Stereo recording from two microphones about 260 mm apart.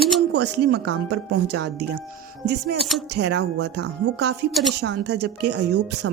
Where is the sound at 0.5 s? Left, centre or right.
Right.